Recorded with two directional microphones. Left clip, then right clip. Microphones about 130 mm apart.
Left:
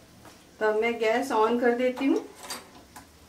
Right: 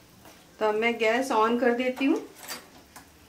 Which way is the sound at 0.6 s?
25° right (ahead or behind).